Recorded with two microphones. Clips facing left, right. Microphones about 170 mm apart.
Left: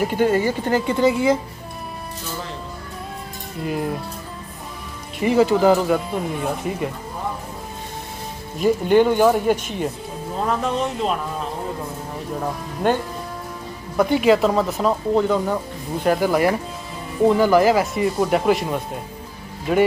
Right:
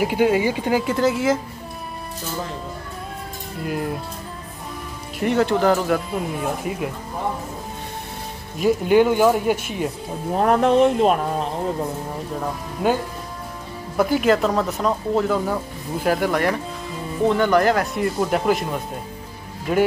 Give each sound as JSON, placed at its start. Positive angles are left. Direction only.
{"t": 0.0, "sound": "speech", "side_deg": -10}
{"t": 3.6, "sound": "speech", "side_deg": 0}
{"t": 5.2, "sound": "speech", "side_deg": 0}
{"t": 8.5, "sound": "speech", "side_deg": -5}
{"t": 10.4, "sound": "speech", "side_deg": -60}
{"t": 12.8, "sound": "speech", "side_deg": -5}